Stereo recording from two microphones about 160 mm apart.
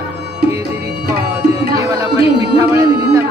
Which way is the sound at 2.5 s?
15° right (ahead or behind).